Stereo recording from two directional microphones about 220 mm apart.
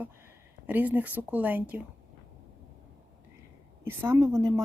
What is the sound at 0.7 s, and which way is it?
Speech, 10° right (ahead or behind).